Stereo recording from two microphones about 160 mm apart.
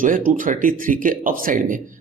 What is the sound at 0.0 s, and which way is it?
Speech, 55° right (ahead or behind).